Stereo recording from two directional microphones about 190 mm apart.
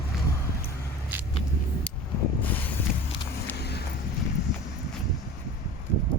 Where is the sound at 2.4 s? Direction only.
10° left (ahead or behind).